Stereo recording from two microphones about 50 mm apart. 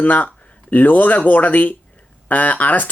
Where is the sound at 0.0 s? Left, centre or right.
Left.